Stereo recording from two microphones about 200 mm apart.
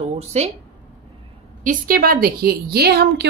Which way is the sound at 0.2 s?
35° right (ahead or behind).